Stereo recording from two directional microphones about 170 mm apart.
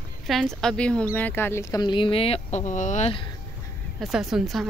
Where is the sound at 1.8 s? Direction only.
30° left (ahead or behind); by 3.1 s 45° left (ahead or behind).